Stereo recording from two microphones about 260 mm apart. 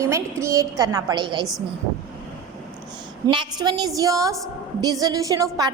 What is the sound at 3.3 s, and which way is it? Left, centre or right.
A woman's voice, centre.